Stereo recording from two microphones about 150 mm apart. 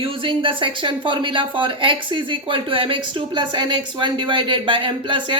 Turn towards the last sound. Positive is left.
turn(degrees=-35)  # may be behind; listen again after turning